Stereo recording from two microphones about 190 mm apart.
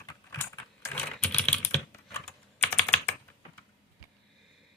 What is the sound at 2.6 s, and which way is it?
Computer keyboard, 10° left (ahead or behind).